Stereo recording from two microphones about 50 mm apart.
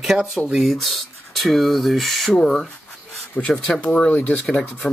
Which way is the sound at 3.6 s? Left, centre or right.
Centre.